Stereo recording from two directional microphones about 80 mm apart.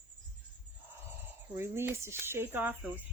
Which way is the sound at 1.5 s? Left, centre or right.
Right.